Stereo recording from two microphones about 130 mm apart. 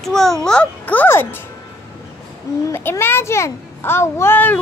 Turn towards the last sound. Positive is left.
turn(degrees=15)  # may be behind; listen again after turning